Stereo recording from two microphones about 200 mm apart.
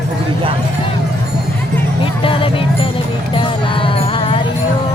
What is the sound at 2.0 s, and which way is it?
Music, 25° left (ahead or behind).